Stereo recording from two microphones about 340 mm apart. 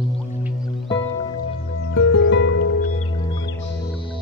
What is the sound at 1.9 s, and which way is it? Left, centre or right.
Music, left.